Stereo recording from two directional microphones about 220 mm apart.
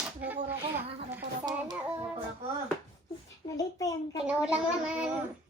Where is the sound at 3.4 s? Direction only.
20° left (ahead or behind).